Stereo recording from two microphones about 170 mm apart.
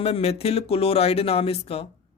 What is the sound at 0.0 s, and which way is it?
Speech, 35° left (ahead or behind).